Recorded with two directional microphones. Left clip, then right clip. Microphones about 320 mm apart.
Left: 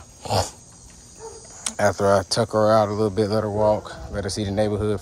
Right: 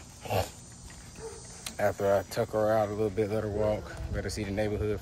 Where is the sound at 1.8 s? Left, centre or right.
Left.